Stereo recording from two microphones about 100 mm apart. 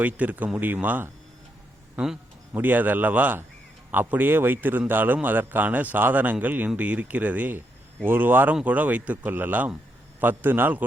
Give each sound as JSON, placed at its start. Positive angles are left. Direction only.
{"t": 0.0, "sound": "speech", "side_deg": -15}
{"t": 2.5, "sound": "a man's voice", "side_deg": -20}